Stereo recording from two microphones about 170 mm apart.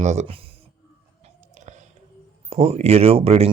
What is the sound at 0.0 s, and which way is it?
Speech, 40° right (ahead or behind).